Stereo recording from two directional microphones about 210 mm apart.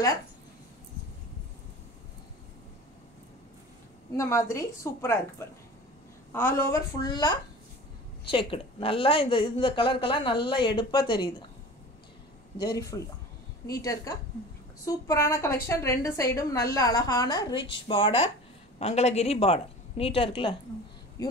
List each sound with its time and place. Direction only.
4.2 s a woman's voice: 15° left (ahead or behind)
12.5 s a woman's voice: 15° left (ahead or behind)